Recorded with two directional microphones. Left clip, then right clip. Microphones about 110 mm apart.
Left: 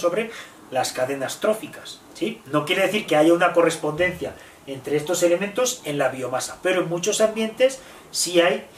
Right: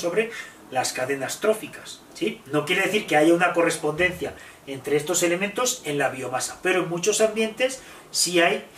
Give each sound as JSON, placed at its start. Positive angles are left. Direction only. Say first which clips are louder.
{"t": 0.7, "sound": "speech", "louder": "left 2 dB", "side_deg": 10}